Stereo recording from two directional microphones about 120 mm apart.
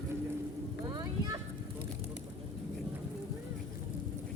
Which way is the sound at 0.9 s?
35° right (ahead or behind).